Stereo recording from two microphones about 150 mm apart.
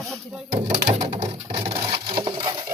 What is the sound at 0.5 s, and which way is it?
Speech, 50° right (ahead or behind).